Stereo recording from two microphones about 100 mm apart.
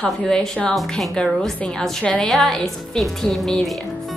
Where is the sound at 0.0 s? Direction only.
5° left (ahead or behind).